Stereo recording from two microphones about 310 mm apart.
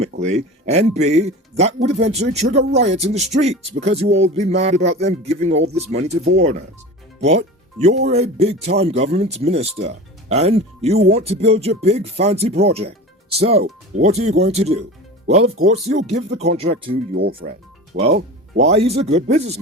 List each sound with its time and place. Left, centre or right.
0.2 s speech: right
7.2 s music: right
8.1 s speech: centre
17.2 s speech: right